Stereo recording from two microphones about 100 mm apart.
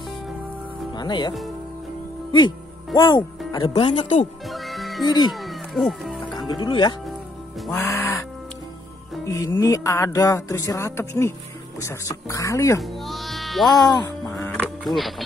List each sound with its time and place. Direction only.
0.9 s speech: 45° left (ahead or behind)
2.3 s speech: 50° left (ahead or behind)
4.5 s music: centre (ahead or behind)
5.0 s speech: 45° left (ahead or behind)
5.3 s music: centre (ahead or behind)
6.3 s speech: 45° left (ahead or behind)
7.7 s music: 25° left (ahead or behind)
9.6 s speech: 30° left (ahead or behind)
12.8 s music: centre (ahead or behind)
13.8 s speech: 40° left (ahead or behind)
15.0 s speech: centre (ahead or behind)